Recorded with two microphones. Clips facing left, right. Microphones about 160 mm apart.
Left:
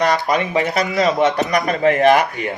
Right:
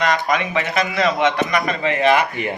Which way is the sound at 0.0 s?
35° left (ahead or behind).